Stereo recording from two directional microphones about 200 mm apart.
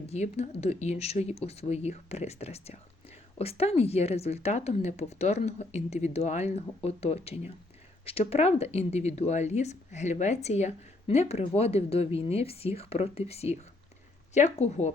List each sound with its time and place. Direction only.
0.1 s speech: 35° left (ahead or behind)